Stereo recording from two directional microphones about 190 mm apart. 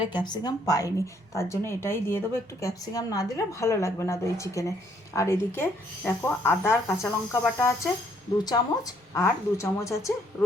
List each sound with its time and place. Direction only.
0.0 s a woman's voice: 25° left (ahead or behind)